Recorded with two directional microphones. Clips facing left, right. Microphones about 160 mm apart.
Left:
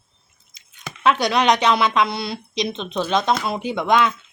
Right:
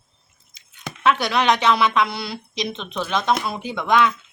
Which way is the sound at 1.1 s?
20° left (ahead or behind).